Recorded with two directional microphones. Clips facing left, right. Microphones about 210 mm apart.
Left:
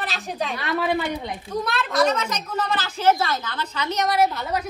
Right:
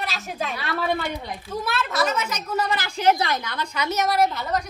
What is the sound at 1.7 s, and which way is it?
A woman's voice, 5° right (ahead or behind).